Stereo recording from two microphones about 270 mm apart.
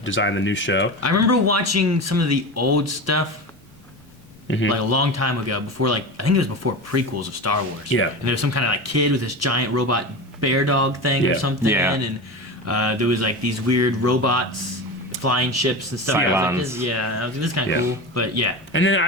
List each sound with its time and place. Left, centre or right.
0.0 s speech: left
1.0 s a man's voice: right
4.4 s a man's voice: left
4.7 s a man's voice: right
11.6 s speech: centre
12.6 s a man's voice: right
16.1 s speech: centre
16.8 s a man's voice: right
18.7 s speech: left